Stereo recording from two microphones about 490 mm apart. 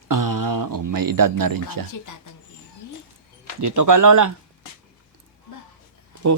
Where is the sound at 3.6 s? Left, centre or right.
Right.